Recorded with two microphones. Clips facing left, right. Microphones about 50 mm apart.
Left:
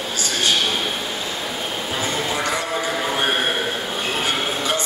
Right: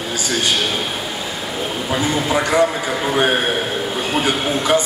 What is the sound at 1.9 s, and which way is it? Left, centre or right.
Speech, centre.